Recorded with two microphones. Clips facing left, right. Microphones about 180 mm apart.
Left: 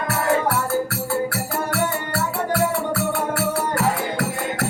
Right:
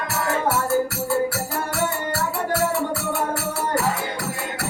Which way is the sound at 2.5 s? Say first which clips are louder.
Left 1 dB; 60° left (ahead or behind).